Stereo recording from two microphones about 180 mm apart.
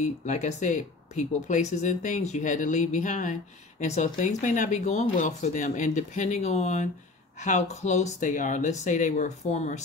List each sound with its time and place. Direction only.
0.0 s speech: 40° left (ahead or behind)